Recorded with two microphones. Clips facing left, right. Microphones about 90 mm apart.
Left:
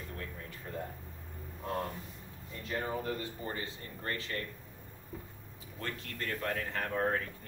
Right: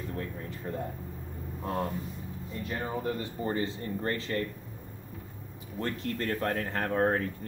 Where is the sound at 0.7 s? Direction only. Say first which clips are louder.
Right 5 dB; 35° right (ahead or behind).